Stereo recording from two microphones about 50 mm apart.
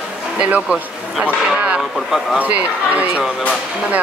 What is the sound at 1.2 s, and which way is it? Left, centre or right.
Speech, right.